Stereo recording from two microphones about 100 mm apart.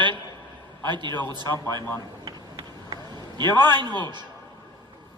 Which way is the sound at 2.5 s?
50° right (ahead or behind).